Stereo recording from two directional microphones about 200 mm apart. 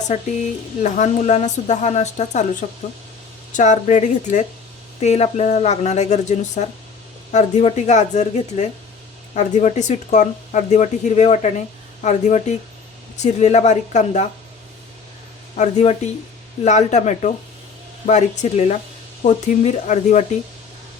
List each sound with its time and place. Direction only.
0.1 s speech: 35° left (ahead or behind)
15.5 s speech: 35° left (ahead or behind)